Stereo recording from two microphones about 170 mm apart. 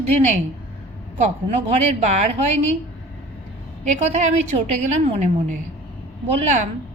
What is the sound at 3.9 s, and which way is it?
Speech, 45° right (ahead or behind).